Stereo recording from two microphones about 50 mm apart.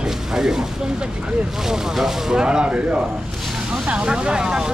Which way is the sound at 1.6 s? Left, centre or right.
Centre.